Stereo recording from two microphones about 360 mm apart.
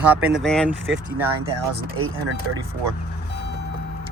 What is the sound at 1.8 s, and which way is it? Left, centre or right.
Speech, right.